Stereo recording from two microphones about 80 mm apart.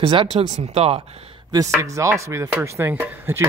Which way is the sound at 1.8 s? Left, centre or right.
Right.